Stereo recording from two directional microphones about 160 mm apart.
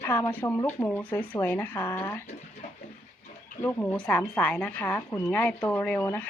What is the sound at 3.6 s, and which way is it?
Speech, 10° left (ahead or behind).